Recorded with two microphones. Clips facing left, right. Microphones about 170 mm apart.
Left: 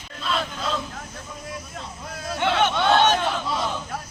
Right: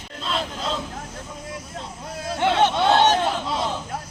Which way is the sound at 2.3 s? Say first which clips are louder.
Right 2 dB; 30° right (ahead or behind).